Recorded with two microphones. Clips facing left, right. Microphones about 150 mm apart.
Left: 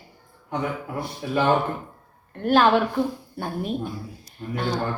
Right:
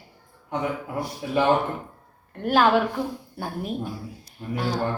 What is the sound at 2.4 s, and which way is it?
A woman's voice, 5° right (ahead or behind).